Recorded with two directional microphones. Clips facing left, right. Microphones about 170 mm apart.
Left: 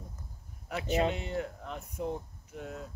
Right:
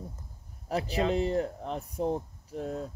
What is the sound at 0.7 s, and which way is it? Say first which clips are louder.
Speech: right 1 dB; 35° right (ahead or behind).